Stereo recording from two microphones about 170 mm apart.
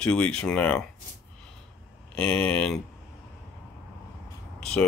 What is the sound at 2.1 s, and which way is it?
Speech, 10° left (ahead or behind).